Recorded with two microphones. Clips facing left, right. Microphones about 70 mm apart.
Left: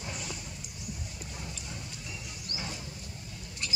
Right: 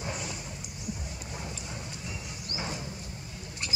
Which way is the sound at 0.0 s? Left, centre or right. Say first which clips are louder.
Right 4 dB; right.